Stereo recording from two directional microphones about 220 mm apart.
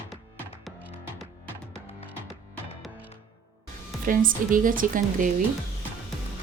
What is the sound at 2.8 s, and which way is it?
Music, 10° right (ahead or behind).